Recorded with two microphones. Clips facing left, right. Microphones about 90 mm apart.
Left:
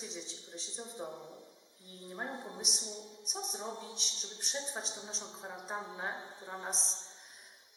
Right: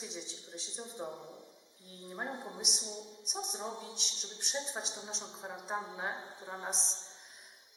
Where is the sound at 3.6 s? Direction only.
15° right (ahead or behind).